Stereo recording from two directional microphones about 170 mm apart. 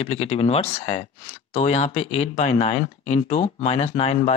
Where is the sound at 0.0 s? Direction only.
35° left (ahead or behind).